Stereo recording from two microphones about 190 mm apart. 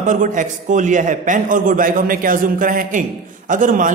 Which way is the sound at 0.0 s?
45° right (ahead or behind).